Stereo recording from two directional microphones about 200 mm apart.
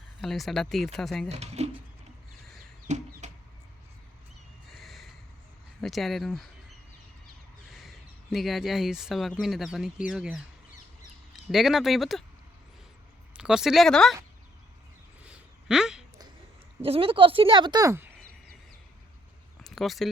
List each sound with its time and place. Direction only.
0.2 s speech: centre (ahead or behind)
1.3 s speech: 30° right (ahead or behind)
2.8 s chicken: 35° right (ahead or behind)
4.7 s snort: centre (ahead or behind)
5.8 s speech: centre (ahead or behind)
7.7 s speech: centre (ahead or behind)
11.5 s speech: centre (ahead or behind)
13.3 s speech: 5° right (ahead or behind)
15.3 s a sound: 5° right (ahead or behind)
16.8 s speech: 30° right (ahead or behind)
19.6 s a sound: centre (ahead or behind)